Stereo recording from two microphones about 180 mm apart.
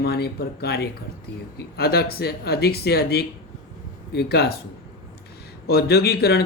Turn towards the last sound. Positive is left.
turn(degrees=60)  # may be behind; listen again after turning